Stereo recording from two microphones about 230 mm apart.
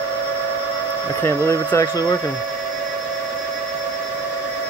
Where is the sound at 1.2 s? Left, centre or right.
Centre.